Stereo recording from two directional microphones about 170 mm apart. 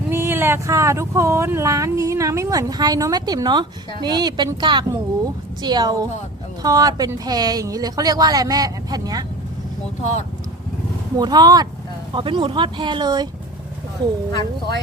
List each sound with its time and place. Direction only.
0.1 s speech: 15° right (ahead or behind)
11.2 s speech: 25° right (ahead or behind)